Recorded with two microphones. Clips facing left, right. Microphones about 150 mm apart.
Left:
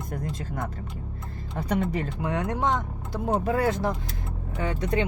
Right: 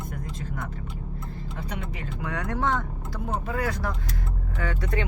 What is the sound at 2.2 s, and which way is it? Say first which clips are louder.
Speech: even; 25° left (ahead or behind).